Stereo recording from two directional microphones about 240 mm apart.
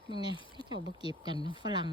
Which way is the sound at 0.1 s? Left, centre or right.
Centre.